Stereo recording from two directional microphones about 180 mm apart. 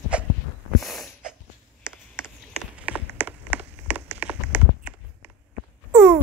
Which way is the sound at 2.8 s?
10° right (ahead or behind).